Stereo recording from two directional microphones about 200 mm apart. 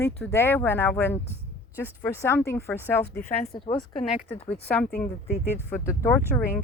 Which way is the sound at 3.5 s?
25° left (ahead or behind).